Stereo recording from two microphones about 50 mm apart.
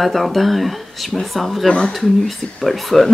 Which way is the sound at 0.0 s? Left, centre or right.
Centre.